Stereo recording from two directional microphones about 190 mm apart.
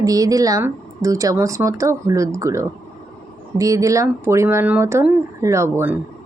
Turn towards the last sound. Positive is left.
turn(degrees=-10)  # may be behind; listen again after turning